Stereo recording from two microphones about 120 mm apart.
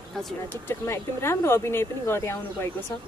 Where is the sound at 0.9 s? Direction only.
20° left (ahead or behind).